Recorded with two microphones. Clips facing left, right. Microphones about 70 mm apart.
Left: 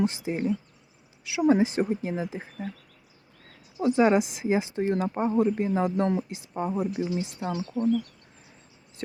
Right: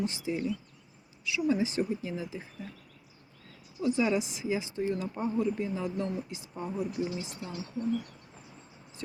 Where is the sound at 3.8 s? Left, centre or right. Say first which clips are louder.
Left 7 dB; left.